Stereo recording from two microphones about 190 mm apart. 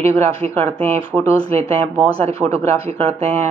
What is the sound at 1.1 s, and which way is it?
Speech, 10° right (ahead or behind).